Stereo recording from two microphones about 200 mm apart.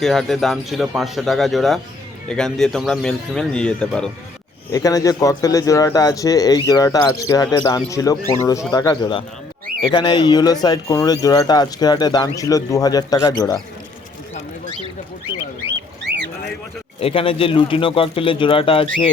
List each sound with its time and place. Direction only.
0.0 s speech: centre (ahead or behind)
4.7 s speech: 15° left (ahead or behind)
15.6 s bird: 60° right (ahead or behind)
17.0 s speech: 30° left (ahead or behind)